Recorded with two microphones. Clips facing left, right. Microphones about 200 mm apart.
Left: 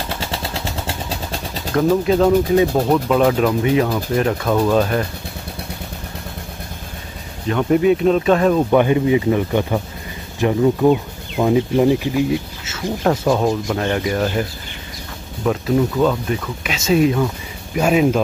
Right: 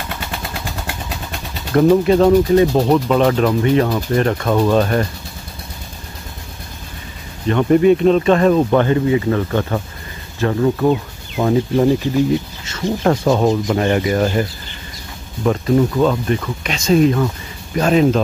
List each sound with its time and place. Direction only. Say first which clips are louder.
0.1 s vehicle: left 2 dB; 30° left (ahead or behind)
1.7 s speech: right 4 dB; centre (ahead or behind)
7.4 s speech: right 3 dB; centre (ahead or behind)
8.7 s speech: even; 15° left (ahead or behind)
15.4 s speech: right 2 dB; centre (ahead or behind)